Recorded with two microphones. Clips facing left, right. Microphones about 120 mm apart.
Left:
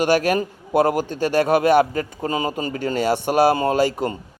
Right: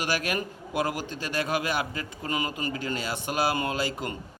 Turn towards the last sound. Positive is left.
turn(degrees=35)  # may be behind; listen again after turning